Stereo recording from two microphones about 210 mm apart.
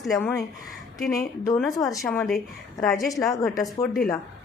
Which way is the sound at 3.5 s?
15° left (ahead or behind).